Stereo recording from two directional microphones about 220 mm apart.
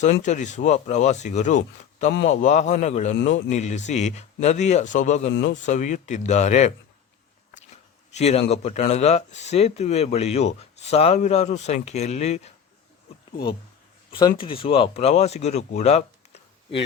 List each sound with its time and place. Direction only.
0.0 s speech: 30° left (ahead or behind)
2.1 s a man's voice: 55° left (ahead or behind)
2.4 s speech: 30° left (ahead or behind)
8.1 s speech: 30° left (ahead or behind)
13.3 s speech: 45° left (ahead or behind)
14.1 s speech: 20° left (ahead or behind)